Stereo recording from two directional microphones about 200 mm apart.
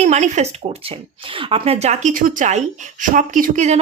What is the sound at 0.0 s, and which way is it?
Speech, 35° right (ahead or behind).